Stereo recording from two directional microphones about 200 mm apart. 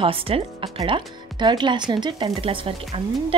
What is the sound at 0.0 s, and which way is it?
Speech, 30° right (ahead or behind).